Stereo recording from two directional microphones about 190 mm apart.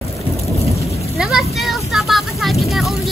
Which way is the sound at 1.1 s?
5° right (ahead or behind).